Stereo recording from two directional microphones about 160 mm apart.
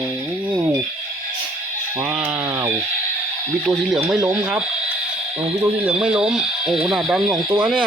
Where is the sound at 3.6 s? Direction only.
Centre (ahead or behind).